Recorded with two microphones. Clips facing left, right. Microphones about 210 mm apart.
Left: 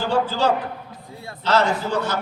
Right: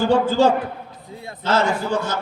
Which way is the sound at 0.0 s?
50° right (ahead or behind).